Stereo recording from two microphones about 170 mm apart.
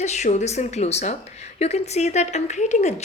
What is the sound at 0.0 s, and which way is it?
A woman's voice, 45° left (ahead or behind).